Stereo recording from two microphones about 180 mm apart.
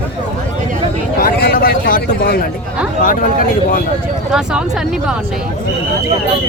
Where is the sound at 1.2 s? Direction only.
55° left (ahead or behind).